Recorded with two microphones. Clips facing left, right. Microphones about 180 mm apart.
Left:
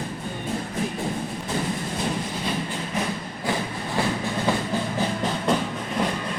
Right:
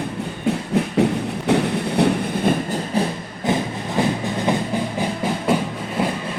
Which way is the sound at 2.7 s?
35° right (ahead or behind).